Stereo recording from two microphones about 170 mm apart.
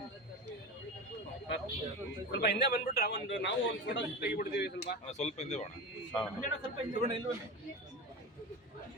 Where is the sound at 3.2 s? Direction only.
90° left; by 4.9 s 75° left (ahead or behind).